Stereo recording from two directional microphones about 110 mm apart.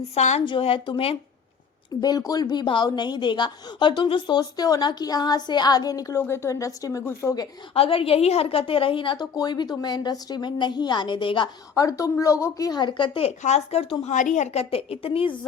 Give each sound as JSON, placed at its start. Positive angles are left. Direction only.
{"t": 0.1, "sound": "speech", "side_deg": 75}
{"t": 0.4, "sound": "a woman's voice", "side_deg": 55}
{"t": 2.0, "sound": "a woman's voice", "side_deg": 35}
{"t": 7.7, "sound": "a woman's voice", "side_deg": 55}
{"t": 11.7, "sound": "a woman's voice", "side_deg": 30}
{"t": 13.2, "sound": "speech", "side_deg": 80}
{"t": 14.0, "sound": "a woman's voice", "side_deg": 90}